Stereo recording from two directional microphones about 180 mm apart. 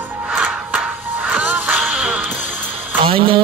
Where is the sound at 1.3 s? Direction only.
10° right (ahead or behind).